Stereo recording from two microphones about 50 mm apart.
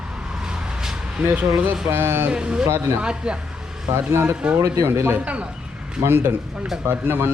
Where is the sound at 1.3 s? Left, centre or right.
Right.